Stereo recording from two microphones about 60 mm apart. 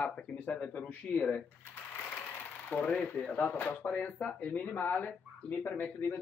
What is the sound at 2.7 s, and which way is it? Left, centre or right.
Speech, left.